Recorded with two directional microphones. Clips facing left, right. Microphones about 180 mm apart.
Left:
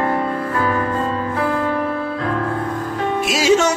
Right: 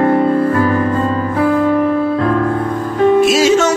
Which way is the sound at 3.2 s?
15° left (ahead or behind).